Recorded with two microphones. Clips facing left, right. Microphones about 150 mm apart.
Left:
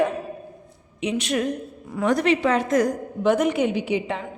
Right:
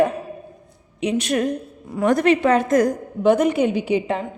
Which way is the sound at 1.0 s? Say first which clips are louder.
Right 3 dB; 40° right (ahead or behind).